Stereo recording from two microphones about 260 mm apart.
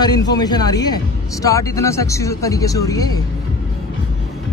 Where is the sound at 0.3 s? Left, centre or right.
Centre.